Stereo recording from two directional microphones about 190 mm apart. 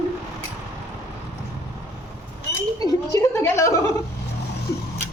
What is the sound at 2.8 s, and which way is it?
A woman's voice, 15° left (ahead or behind).